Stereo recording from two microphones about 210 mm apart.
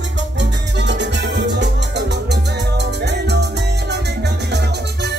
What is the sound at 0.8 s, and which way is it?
Music, 55° right (ahead or behind).